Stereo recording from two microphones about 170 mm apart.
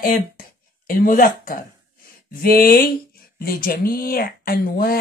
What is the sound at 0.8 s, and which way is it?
Speech, 55° left (ahead or behind).